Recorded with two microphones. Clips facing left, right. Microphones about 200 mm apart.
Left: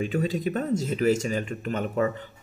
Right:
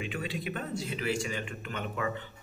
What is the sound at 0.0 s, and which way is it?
Speech, 40° left (ahead or behind).